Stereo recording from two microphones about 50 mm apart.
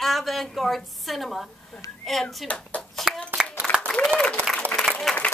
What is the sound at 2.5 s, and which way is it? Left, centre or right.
Speech, left.